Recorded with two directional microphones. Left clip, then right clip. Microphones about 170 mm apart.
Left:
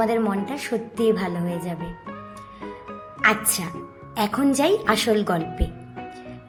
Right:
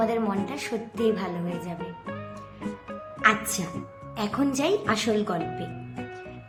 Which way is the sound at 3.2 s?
35° left (ahead or behind).